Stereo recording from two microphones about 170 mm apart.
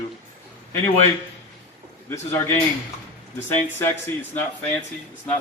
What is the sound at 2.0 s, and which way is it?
Speech, 15° left (ahead or behind).